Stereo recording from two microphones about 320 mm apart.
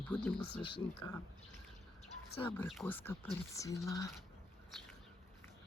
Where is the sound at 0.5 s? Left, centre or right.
Centre.